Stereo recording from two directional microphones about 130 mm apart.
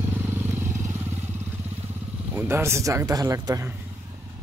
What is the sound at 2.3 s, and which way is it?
Speech, 20° right (ahead or behind).